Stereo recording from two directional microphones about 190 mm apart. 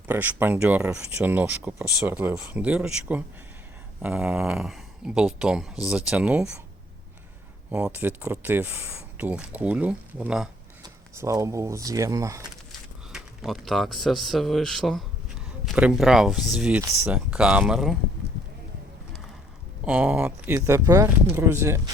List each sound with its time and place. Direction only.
0.1 s speech: 10° right (ahead or behind)
7.7 s speech: 5° right (ahead or behind)
10.8 s speech: 15° right (ahead or behind)
13.1 s speech: centre (ahead or behind)
19.8 s speech: 10° right (ahead or behind)